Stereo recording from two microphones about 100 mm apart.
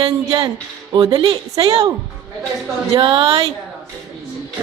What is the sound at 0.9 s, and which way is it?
Speech, 50° right (ahead or behind).